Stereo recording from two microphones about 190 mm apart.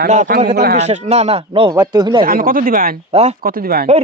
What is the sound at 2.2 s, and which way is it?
Speech, 50° right (ahead or behind).